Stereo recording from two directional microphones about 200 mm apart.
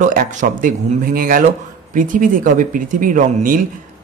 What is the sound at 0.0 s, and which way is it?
A man's voice, 40° right (ahead or behind).